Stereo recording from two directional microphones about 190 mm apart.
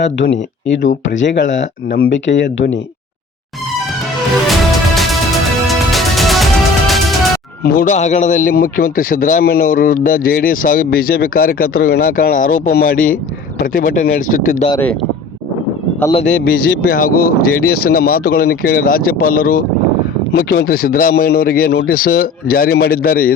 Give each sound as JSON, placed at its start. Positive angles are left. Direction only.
{"t": 0.0, "sound": "speech", "side_deg": 70}
{"t": 4.9, "sound": "music", "side_deg": 0}
{"t": 7.6, "sound": "a man's voice", "side_deg": 50}
{"t": 16.1, "sound": "a man's voice", "side_deg": 40}